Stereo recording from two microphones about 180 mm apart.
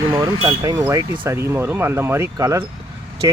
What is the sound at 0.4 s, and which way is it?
Speech, 20° right (ahead or behind).